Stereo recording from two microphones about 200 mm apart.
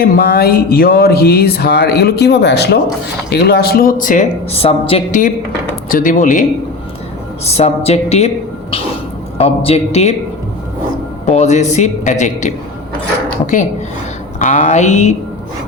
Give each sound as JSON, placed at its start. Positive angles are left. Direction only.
{"t": 0.0, "sound": "a man's voice", "side_deg": 50}
{"t": 7.4, "sound": "a man's voice", "side_deg": 30}
{"t": 9.4, "sound": "a man's voice", "side_deg": 30}
{"t": 11.3, "sound": "a man's voice", "side_deg": 35}
{"t": 14.3, "sound": "a man's voice", "side_deg": 40}